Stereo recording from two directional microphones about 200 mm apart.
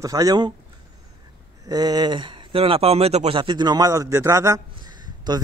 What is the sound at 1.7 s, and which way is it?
Speech, 20° right (ahead or behind).